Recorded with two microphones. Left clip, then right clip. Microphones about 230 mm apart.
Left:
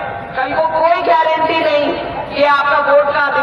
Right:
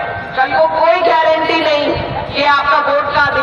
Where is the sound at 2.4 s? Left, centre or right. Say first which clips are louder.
Even; right.